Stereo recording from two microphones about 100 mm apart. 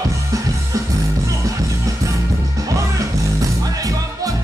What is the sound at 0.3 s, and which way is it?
Music, 35° right (ahead or behind).